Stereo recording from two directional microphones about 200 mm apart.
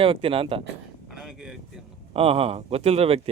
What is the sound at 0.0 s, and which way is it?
Speech, 25° right (ahead or behind).